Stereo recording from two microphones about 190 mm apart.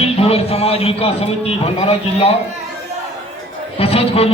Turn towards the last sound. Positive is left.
turn(degrees=30)  # may be behind; listen again after turning